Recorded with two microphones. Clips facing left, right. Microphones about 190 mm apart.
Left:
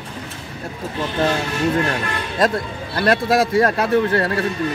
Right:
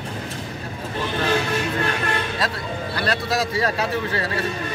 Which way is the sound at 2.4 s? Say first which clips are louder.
Left 6 dB; 50° left (ahead or behind).